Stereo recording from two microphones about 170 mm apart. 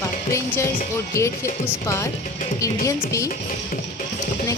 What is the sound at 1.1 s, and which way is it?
Speech, 15° left (ahead or behind).